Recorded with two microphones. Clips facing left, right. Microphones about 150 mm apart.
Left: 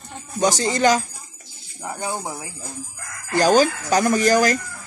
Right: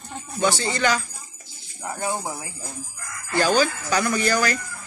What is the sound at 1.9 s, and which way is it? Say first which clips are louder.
Speech: even; 15° left (ahead or behind).